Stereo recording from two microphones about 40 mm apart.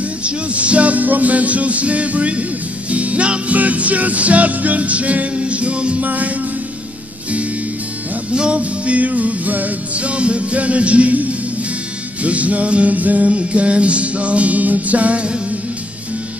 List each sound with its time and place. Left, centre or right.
0.2 s music: right
6.0 s music: right
8.3 s music: right
9.9 s music: right